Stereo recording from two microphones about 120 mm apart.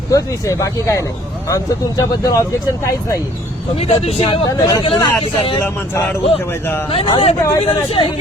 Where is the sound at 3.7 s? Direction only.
60° left (ahead or behind).